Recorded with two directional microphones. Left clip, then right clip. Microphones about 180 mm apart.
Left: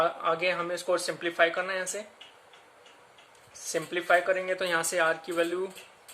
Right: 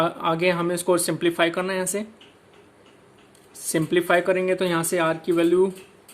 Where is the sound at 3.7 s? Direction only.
25° right (ahead or behind).